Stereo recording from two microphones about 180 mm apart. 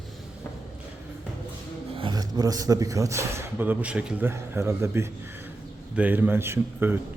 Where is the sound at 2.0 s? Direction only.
25° right (ahead or behind).